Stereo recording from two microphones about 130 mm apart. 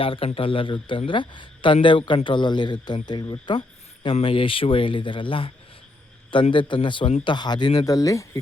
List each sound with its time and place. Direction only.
0.0 s speech: 45° left (ahead or behind); by 8.4 s 25° left (ahead or behind)